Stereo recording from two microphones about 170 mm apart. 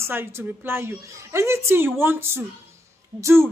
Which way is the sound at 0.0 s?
15° right (ahead or behind).